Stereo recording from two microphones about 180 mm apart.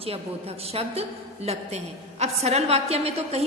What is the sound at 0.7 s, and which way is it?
A woman's voice, 35° right (ahead or behind).